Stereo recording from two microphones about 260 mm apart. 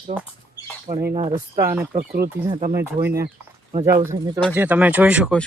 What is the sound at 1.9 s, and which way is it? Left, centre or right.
Speech, right.